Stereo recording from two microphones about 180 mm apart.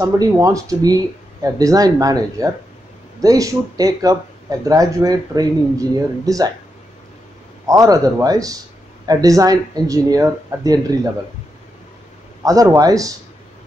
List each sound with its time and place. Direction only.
0.0 s speech: 20° right (ahead or behind)
7.6 s speech: 20° right (ahead or behind)
12.4 s speech: 20° right (ahead or behind)